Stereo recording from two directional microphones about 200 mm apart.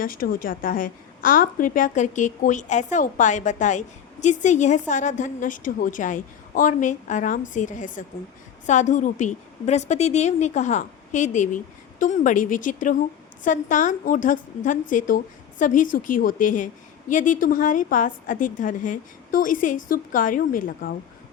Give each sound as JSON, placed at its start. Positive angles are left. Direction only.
{"t": 0.0, "sound": "a woman's voice", "side_deg": 45}